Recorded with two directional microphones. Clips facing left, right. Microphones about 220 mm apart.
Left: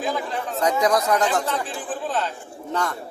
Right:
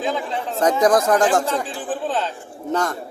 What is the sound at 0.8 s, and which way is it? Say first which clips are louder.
Speech: right 5 dB; 50° right (ahead or behind).